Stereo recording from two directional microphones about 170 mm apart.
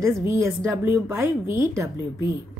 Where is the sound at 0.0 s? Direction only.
20° right (ahead or behind).